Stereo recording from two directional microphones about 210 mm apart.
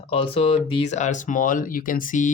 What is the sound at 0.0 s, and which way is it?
Speech, 25° left (ahead or behind).